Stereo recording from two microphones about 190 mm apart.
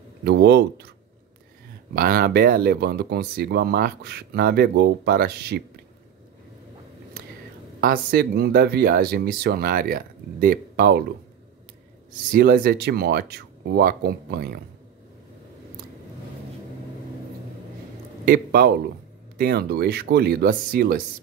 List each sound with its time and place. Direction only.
0.2 s speech: 60° right (ahead or behind)
2.0 s speech: 50° right (ahead or behind)
7.8 s speech: 50° right (ahead or behind)
12.1 s speech: 50° right (ahead or behind)
18.2 s a man's voice: 55° right (ahead or behind)